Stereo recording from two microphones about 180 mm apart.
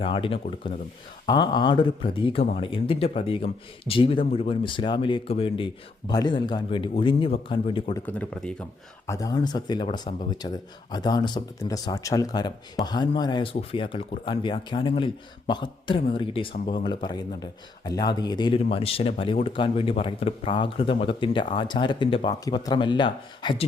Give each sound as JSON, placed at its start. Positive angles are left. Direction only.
{"t": 0.0, "sound": "speech", "side_deg": 30}
{"t": 7.9, "sound": "speech", "side_deg": 10}
{"t": 9.0, "sound": "speech", "side_deg": 20}